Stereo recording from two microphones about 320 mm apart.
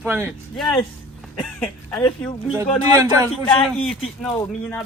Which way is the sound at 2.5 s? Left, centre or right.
Centre.